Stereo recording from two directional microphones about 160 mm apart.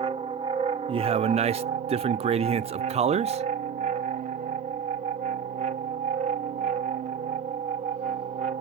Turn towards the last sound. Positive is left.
turn(degrees=-50)  # may be behind; listen again after turning